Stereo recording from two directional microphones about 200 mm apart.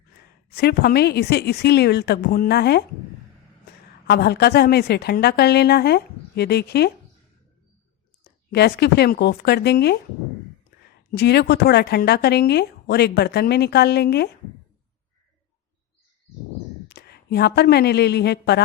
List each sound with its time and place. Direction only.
0.5 s speech: 55° left (ahead or behind)
4.0 s speech: 55° left (ahead or behind)
8.2 s speech: 55° left (ahead or behind)
11.1 s speech: 55° left (ahead or behind)
16.9 s a woman's voice: 55° left (ahead or behind)